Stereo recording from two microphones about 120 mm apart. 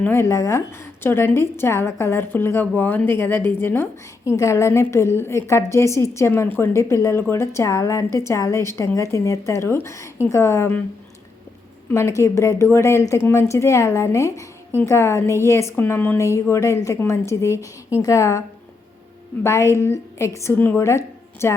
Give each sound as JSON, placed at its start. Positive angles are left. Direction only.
{"t": 0.0, "sound": "a woman's voice", "side_deg": 20}
{"t": 11.9, "sound": "a woman's voice", "side_deg": 25}